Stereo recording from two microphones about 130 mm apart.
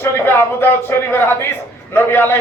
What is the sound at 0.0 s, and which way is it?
A man's voice, 20° left (ahead or behind).